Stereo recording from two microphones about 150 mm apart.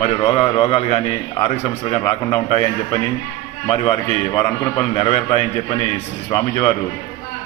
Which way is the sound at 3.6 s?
35° left (ahead or behind).